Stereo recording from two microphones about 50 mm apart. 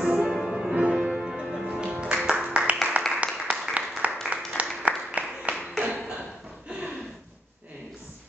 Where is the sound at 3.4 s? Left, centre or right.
Centre.